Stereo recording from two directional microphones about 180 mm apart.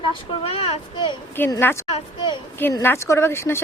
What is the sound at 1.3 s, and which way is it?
Speech, 10° left (ahead or behind).